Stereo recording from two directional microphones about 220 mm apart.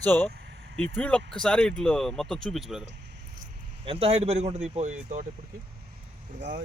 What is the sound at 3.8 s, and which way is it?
A man's voice, 25° right (ahead or behind).